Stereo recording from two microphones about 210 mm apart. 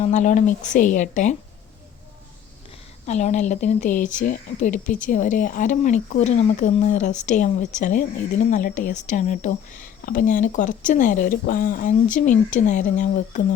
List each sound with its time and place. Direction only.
0.0 s a woman's voice: 35° left (ahead or behind)
3.1 s a woman's voice: 35° left (ahead or behind)